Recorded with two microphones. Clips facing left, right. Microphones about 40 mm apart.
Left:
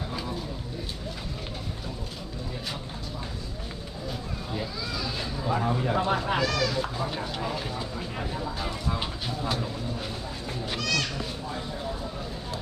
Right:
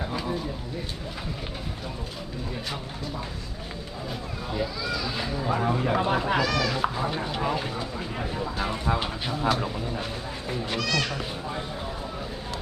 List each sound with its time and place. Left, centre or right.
0.1 s a sound: centre
5.1 s speech: centre
6.4 s speech: right
8.6 s speech: right
10.7 s speech: centre